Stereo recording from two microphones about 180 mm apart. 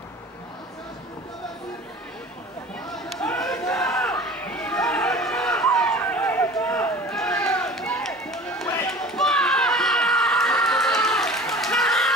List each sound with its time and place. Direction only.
2.9 s a sound: centre (ahead or behind)
4.0 s chatter: 5° left (ahead or behind)
9.0 s crowd: 5° left (ahead or behind)